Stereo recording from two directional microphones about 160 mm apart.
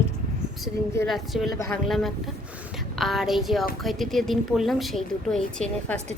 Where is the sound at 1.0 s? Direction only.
Centre (ahead or behind).